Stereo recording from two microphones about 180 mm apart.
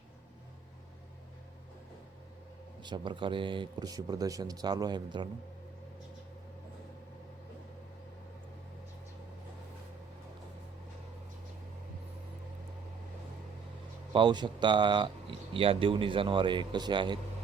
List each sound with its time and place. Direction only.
2.8 s speech: 25° right (ahead or behind)
14.1 s speech: 25° right (ahead or behind)